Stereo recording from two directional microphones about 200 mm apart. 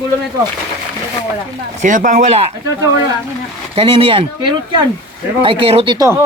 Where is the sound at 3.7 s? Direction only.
25° right (ahead or behind).